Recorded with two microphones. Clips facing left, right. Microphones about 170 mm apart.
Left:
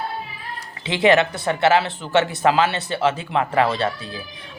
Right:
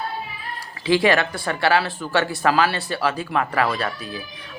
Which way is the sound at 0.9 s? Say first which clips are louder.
Left 1 dB; 20° left (ahead or behind).